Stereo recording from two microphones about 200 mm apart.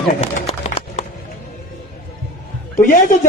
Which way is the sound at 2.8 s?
40° left (ahead or behind).